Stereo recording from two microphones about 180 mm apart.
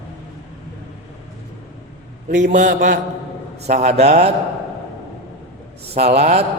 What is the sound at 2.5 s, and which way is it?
A man's voice, 45° right (ahead or behind).